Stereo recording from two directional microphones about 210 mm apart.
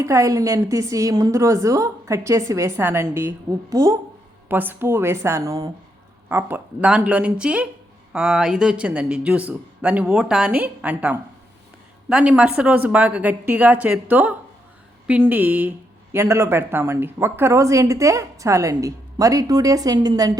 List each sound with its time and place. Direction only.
0.0 s speech: 15° right (ahead or behind)